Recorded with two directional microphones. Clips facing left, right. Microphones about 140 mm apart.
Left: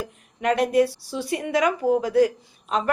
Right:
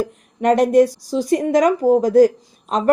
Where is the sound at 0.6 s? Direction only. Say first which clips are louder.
Right 5 dB; 40° right (ahead or behind).